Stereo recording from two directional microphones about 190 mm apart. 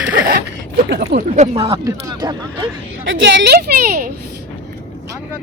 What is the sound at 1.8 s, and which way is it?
Speech, 20° right (ahead or behind).